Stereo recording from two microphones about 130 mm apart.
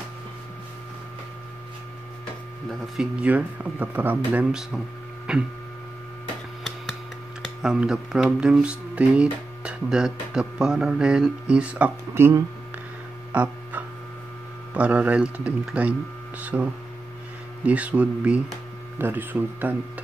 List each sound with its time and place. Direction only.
3.0 s speech: 10° right (ahead or behind)
5.3 s a sound: 5° right (ahead or behind)
7.6 s speech: 5° right (ahead or behind)
12.1 s speech: 20° right (ahead or behind)
13.3 s music: 10° right (ahead or behind)
14.7 s speech: 10° right (ahead or behind)
17.6 s speech: 10° right (ahead or behind)